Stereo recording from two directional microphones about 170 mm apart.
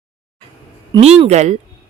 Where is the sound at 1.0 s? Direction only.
35° right (ahead or behind).